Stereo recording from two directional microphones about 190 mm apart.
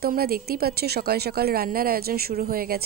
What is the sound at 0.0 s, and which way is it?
Speech, 55° right (ahead or behind).